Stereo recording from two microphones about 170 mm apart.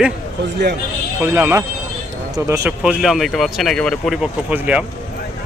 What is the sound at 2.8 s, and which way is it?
Speech, centre (ahead or behind).